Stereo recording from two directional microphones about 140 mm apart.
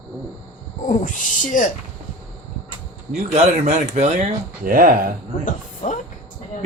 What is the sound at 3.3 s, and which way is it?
Speech, 55° right (ahead or behind).